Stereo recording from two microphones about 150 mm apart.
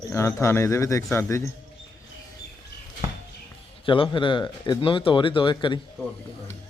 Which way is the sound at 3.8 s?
35° left (ahead or behind).